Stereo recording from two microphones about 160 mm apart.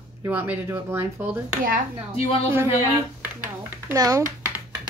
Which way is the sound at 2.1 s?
40° left (ahead or behind).